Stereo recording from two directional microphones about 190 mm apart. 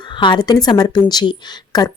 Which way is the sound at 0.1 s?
25° left (ahead or behind).